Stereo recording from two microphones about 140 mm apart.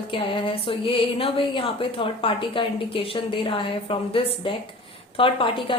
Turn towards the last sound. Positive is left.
turn(degrees=40)  # may be behind; listen again after turning